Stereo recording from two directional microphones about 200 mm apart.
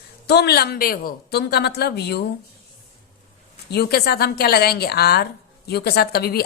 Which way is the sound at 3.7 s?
55° left (ahead or behind).